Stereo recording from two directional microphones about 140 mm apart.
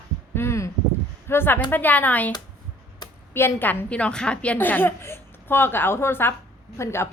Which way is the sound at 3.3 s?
15° left (ahead or behind).